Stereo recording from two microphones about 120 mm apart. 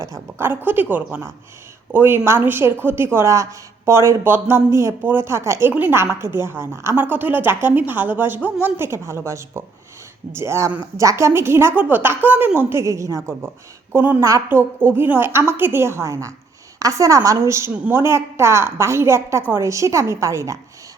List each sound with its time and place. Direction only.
0.1 s speech: 20° right (ahead or behind)